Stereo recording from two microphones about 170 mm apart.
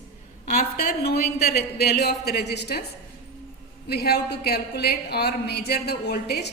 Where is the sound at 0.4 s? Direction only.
55° left (ahead or behind); by 2.8 s 75° left (ahead or behind).